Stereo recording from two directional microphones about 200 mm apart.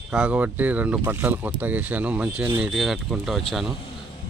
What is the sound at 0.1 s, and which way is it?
Speech, 5° right (ahead or behind).